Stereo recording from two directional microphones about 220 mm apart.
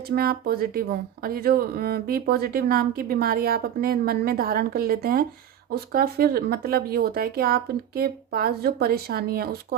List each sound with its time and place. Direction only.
0.1 s speech: 45° right (ahead or behind)